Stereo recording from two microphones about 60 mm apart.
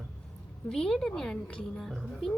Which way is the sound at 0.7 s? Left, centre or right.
Centre.